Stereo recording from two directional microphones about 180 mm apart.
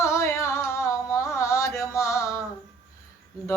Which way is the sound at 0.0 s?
15° left (ahead or behind).